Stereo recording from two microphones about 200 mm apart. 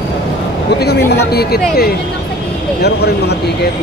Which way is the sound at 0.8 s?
55° left (ahead or behind).